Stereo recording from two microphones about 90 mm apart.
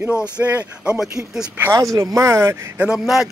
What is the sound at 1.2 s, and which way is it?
Speech, 5° right (ahead or behind).